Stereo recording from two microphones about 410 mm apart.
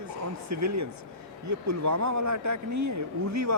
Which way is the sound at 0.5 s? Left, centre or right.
Right.